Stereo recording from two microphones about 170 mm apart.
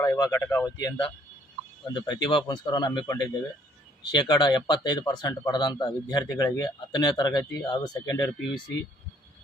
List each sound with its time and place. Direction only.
0.0 s speech: 20° left (ahead or behind)